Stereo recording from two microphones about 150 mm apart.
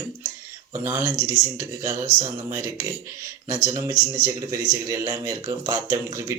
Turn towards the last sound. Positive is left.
turn(degrees=-20)  # may be behind; listen again after turning